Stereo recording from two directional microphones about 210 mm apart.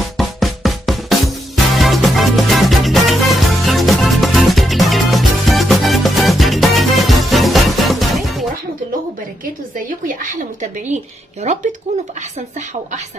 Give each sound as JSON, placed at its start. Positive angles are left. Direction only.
{"t": 0.2, "sound": "music", "side_deg": 0}
{"t": 9.8, "sound": "a sound", "side_deg": -40}
{"t": 11.4, "sound": "speech", "side_deg": -30}